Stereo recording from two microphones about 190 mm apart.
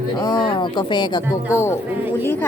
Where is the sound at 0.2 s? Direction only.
20° left (ahead or behind).